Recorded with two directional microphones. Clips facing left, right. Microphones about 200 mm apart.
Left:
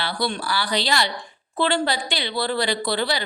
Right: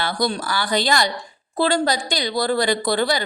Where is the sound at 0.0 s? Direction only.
45° right (ahead or behind).